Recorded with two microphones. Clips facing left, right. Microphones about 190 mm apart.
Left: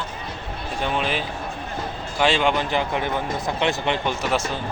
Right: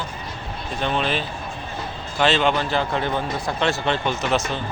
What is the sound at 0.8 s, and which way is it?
A man's voice, 10° left (ahead or behind).